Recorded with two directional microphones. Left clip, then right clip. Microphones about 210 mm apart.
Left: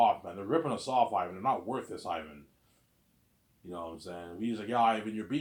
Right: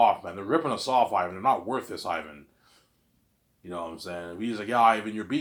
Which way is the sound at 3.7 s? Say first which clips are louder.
Right 6 dB; 25° right (ahead or behind).